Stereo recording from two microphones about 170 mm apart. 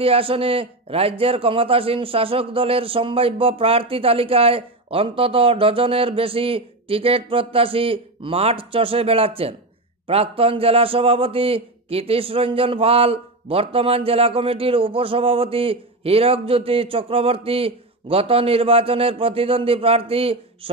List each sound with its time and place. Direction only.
0.0 s a man's voice: 35° right (ahead or behind)